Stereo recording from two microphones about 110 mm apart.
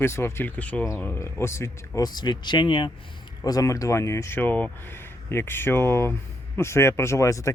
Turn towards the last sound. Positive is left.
turn(degrees=30)  # may be behind; listen again after turning